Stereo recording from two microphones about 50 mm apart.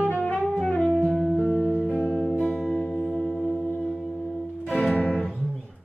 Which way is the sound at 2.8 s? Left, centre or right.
Centre.